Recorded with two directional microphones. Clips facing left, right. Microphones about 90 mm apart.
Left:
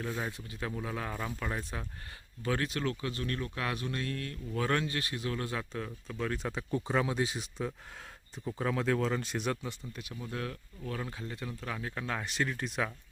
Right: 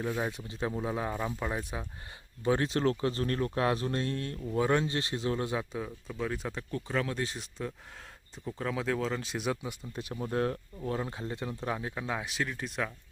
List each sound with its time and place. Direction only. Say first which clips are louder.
0.0 s speech: right 4 dB; 20° right (ahead or behind)
2.4 s speech: right 5 dB; 25° right (ahead or behind)
4.6 s speech: right 3 dB; 20° right (ahead or behind); by 6.6 s 5° right (ahead or behind)
6.6 s speech: left 3 dB; 15° left (ahead or behind); by 9.7 s 10° right (ahead or behind)
9.9 s speech: right 7 dB; 40° right (ahead or behind); by 12.9 s centre (ahead or behind)